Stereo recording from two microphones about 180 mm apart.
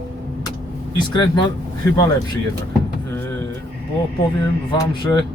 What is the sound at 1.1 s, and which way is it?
Speech, 25° left (ahead or behind).